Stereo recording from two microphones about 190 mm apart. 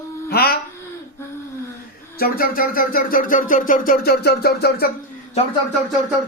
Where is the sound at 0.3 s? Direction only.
55° left (ahead or behind).